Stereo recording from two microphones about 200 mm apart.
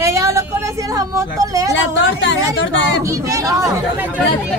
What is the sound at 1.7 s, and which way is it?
A woman's voice, 65° left (ahead or behind).